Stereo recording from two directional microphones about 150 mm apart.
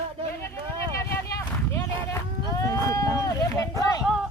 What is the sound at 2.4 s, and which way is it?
Sheep, 25° left (ahead or behind).